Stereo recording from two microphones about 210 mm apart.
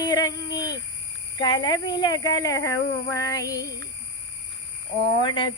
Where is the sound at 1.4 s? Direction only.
20° left (ahead or behind).